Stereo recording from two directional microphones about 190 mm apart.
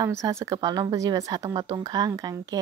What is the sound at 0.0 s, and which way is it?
Speech, 15° right (ahead or behind).